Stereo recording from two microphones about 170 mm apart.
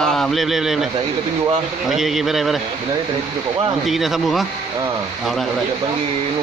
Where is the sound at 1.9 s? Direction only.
Centre (ahead or behind).